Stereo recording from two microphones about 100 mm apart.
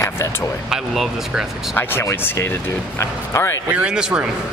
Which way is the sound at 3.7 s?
10° right (ahead or behind).